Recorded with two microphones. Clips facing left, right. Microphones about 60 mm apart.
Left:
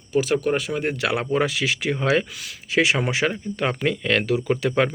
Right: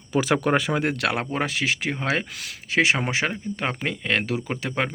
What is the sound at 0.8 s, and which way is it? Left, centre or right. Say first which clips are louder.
Speech: even; right.